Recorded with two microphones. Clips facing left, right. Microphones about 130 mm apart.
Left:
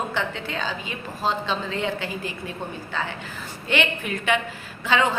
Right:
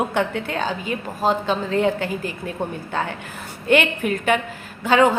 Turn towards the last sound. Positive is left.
turn(degrees=-45)  # may be behind; listen again after turning